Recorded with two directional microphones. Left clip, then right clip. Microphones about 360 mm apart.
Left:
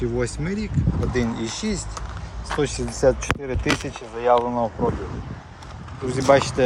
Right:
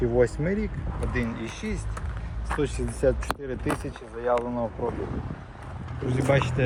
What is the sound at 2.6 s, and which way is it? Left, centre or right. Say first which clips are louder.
Speech: left 5 dB; centre.